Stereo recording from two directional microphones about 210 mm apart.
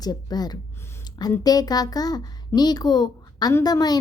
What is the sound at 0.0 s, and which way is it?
A woman's voice, 20° left (ahead or behind).